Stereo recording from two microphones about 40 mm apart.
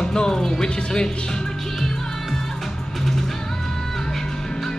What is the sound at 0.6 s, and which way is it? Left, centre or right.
Speech, left.